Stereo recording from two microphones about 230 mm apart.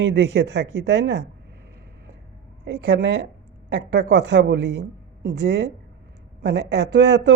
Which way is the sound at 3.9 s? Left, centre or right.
Right.